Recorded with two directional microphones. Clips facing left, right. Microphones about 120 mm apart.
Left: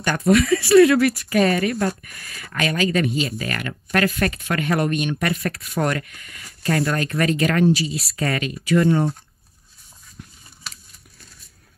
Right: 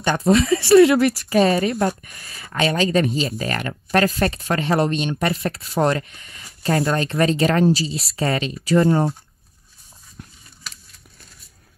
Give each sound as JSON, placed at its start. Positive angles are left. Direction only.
{"t": 0.0, "sound": "speech", "side_deg": -25}